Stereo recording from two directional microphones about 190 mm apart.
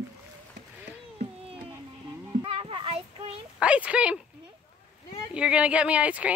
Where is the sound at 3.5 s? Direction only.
5° right (ahead or behind).